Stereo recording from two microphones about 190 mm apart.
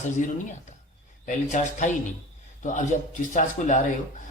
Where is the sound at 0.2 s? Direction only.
40° left (ahead or behind).